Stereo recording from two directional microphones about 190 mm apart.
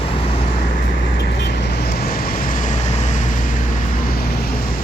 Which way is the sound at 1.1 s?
60° left (ahead or behind).